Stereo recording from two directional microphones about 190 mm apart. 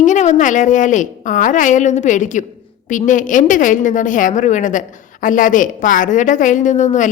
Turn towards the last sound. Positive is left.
turn(degrees=40)  # may be behind; listen again after turning